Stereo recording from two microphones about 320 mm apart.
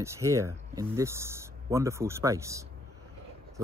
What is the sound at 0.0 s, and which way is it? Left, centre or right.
Speech, centre.